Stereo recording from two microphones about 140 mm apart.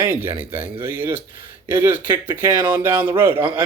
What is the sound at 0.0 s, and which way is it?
Speech, 15° right (ahead or behind).